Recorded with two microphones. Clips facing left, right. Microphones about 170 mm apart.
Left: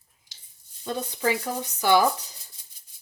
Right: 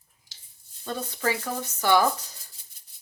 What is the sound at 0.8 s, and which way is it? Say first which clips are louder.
Speech: left 2 dB; 15° left (ahead or behind).